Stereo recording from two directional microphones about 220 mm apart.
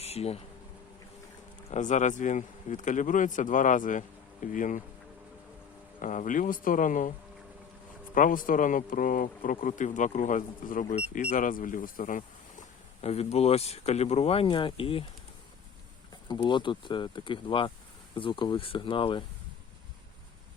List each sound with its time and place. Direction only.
0.0 s a sound: 30° left (ahead or behind)
1.7 s speech: 35° left (ahead or behind)
6.0 s speech: 35° left (ahead or behind)
8.1 s speech: 40° left (ahead or behind)
16.3 s speech: 20° left (ahead or behind)